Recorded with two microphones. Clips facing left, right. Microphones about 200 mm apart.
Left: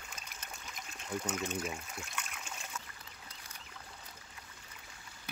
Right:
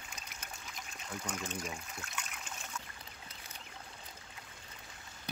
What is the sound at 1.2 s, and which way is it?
Speech, 5° left (ahead or behind).